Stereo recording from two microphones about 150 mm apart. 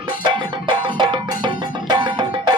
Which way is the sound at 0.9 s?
30° right (ahead or behind).